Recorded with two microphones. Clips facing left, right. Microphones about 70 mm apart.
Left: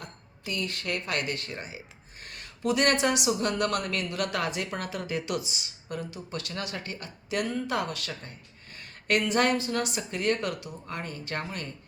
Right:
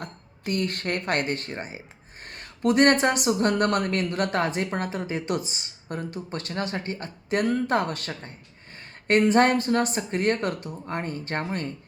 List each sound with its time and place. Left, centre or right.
0.0 s speech: right